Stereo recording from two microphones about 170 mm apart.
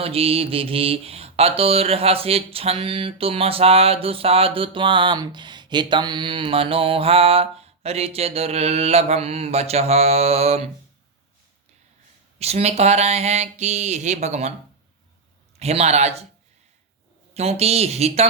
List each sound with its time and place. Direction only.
0.0 s mantra: 35° right (ahead or behind)
12.4 s mantra: 40° right (ahead or behind)
15.5 s mantra: 40° right (ahead or behind)
17.3 s mantra: 40° right (ahead or behind)